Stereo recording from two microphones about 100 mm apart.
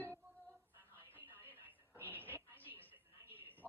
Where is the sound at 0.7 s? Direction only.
25° right (ahead or behind).